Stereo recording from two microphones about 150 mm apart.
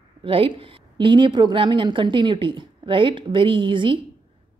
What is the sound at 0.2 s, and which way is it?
A woman's voice, 40° right (ahead or behind).